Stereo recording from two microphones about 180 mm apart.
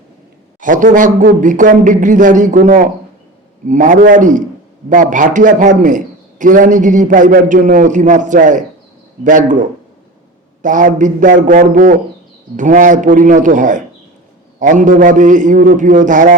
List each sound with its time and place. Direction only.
0.6 s speech: 45° right (ahead or behind)